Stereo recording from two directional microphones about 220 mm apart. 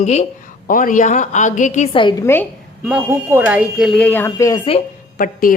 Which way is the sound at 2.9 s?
5° right (ahead or behind).